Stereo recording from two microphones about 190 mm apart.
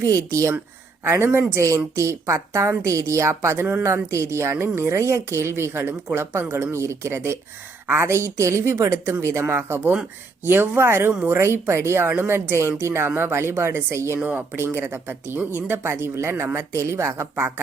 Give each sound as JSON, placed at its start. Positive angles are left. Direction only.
{"t": 0.0, "sound": "a woman's voice", "side_deg": -15}